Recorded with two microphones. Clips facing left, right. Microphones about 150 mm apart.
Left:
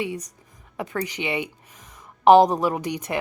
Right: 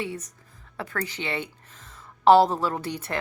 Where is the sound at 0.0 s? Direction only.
15° left (ahead or behind).